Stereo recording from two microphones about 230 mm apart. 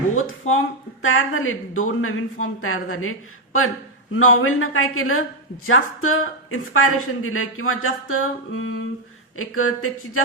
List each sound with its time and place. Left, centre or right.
1.0 s speech: left